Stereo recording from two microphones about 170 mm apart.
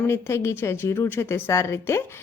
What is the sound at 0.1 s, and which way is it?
A woman's voice, 15° left (ahead or behind).